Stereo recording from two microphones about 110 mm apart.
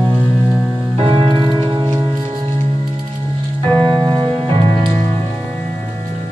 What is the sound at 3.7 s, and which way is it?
Music, 45° right (ahead or behind).